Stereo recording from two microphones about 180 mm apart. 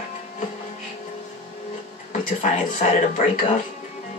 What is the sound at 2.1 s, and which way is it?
Speech, 40° left (ahead or behind).